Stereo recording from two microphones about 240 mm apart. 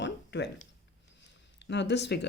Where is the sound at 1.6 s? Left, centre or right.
Left.